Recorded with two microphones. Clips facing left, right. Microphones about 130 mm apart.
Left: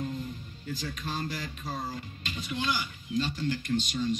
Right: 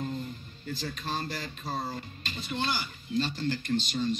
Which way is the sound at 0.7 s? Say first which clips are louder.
Right 1 dB; 30° right (ahead or behind).